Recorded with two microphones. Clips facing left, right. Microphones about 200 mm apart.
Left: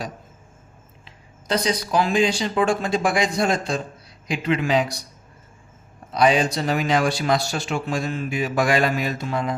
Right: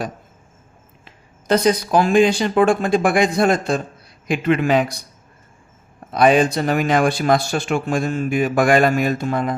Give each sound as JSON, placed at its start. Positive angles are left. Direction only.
{"t": 1.0, "sound": "speech", "side_deg": -50}
{"t": 6.1, "sound": "speech", "side_deg": -55}